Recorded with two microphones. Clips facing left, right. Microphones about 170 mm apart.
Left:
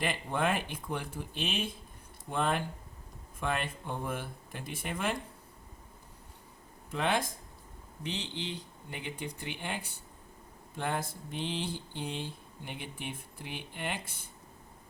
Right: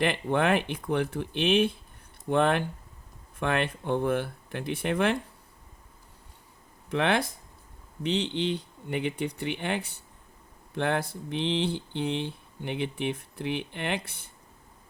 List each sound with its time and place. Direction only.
0.0 s speech: 70° right (ahead or behind)
6.9 s speech: 70° right (ahead or behind)